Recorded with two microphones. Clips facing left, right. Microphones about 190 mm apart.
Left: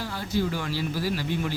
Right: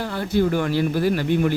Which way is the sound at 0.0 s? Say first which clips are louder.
Right 7 dB; 60° right (ahead or behind).